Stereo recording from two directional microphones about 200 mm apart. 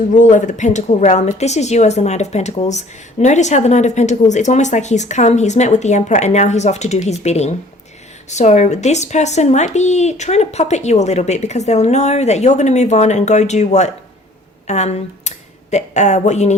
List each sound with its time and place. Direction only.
0.1 s a woman's voice: 40° left (ahead or behind)